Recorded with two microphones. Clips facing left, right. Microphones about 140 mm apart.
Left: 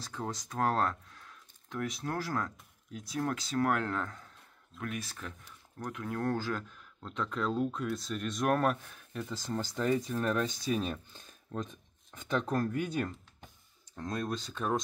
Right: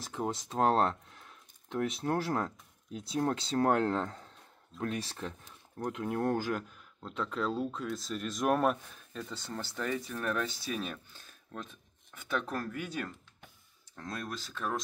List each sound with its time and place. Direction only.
0.0 s speech: 20° right (ahead or behind); by 8.7 s 5° right (ahead or behind)
9.1 s speech: 10° left (ahead or behind)